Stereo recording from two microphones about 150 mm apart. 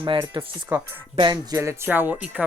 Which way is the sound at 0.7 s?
15° right (ahead or behind).